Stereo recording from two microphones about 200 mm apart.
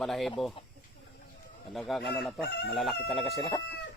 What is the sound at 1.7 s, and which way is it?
Speech, centre (ahead or behind).